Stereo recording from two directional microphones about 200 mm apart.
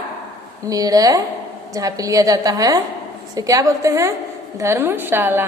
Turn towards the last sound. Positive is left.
turn(degrees=-10)  # may be behind; listen again after turning